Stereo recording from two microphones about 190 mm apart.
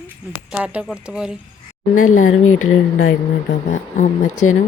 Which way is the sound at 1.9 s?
45° left (ahead or behind).